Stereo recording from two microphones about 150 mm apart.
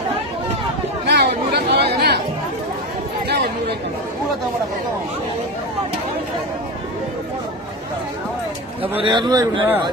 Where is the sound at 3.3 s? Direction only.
90° right.